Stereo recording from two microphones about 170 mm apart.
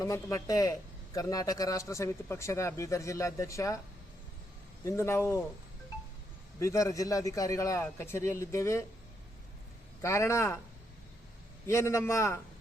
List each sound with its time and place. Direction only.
0.0 s a man's voice: 20° left (ahead or behind)
4.9 s a man's voice: 15° left (ahead or behind)
6.6 s a man's voice: 20° left (ahead or behind)
10.0 s a man's voice: 15° left (ahead or behind)
11.6 s a man's voice: 15° left (ahead or behind)